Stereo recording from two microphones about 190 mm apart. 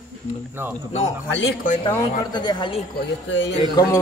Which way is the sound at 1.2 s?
70° left (ahead or behind).